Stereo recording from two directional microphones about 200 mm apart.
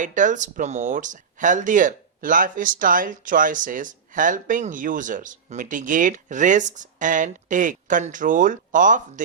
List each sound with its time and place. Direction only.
0.0 s speech: 40° right (ahead or behind)